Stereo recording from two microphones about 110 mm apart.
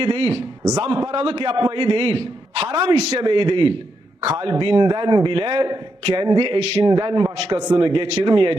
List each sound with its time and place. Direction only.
0.0 s a man's voice: 50° right (ahead or behind)
0.6 s a man's voice: 30° right (ahead or behind)
1.1 s a man's voice: 50° right (ahead or behind)